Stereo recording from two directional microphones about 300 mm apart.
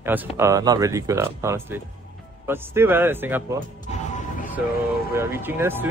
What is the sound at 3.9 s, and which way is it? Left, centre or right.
Music, left.